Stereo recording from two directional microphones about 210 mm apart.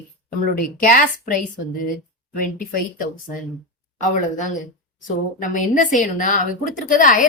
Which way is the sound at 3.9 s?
35° left (ahead or behind).